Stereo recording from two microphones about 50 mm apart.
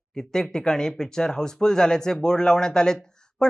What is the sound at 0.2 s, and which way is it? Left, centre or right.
Speech, centre.